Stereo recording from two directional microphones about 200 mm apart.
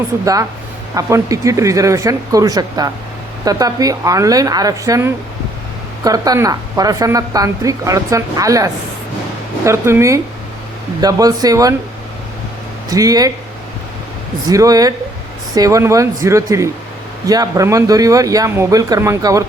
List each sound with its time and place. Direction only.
0.9 s a woman's voice: 15° right (ahead or behind)
12.9 s a woman's voice: 15° right (ahead or behind)
14.5 s a woman's voice: 15° right (ahead or behind)